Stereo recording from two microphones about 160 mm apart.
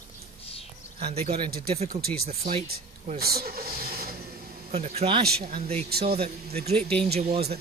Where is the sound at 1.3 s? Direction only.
70° right (ahead or behind).